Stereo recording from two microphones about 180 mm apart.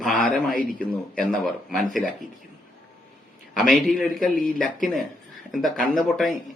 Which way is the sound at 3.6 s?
Centre (ahead or behind).